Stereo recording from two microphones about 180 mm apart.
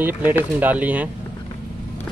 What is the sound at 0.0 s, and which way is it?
Speech, 10° right (ahead or behind).